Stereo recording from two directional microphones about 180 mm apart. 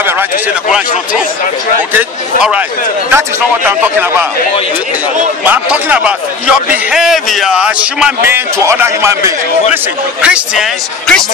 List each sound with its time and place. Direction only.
0.7 s a man's voice: 5° right (ahead or behind)
5.4 s a man's voice: 10° right (ahead or behind)